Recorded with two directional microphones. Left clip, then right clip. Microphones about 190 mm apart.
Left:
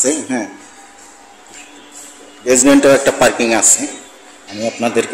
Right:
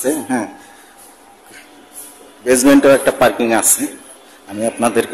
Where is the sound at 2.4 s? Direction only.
10° right (ahead or behind).